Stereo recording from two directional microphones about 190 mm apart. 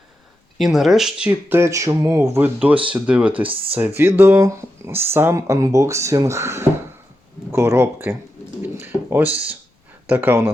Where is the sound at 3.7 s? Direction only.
10° right (ahead or behind).